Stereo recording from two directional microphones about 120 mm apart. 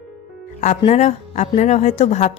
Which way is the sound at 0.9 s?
70° left (ahead or behind).